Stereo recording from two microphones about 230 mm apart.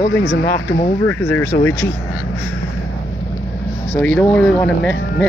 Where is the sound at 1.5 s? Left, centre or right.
Left.